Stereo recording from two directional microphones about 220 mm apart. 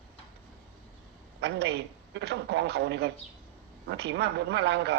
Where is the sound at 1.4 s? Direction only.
50° right (ahead or behind).